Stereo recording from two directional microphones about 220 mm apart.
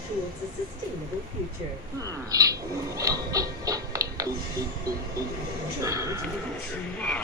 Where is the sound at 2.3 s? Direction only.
15° right (ahead or behind).